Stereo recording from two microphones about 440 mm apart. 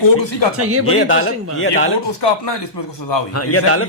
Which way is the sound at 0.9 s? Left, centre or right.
Left.